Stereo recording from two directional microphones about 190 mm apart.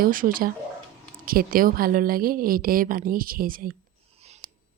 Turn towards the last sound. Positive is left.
turn(degrees=-50)  # may be behind; listen again after turning